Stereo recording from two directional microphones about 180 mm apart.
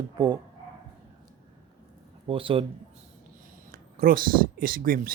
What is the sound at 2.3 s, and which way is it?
Speech, 30° right (ahead or behind).